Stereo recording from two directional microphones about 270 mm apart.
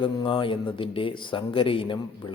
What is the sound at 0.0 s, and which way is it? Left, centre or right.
A man's voice, centre.